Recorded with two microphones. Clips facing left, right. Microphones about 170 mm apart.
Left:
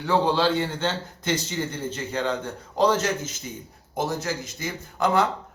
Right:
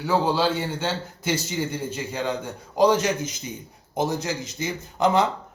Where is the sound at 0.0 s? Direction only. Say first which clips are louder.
Even; 5° right (ahead or behind).